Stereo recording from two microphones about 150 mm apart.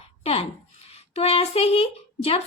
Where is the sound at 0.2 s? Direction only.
40° left (ahead or behind).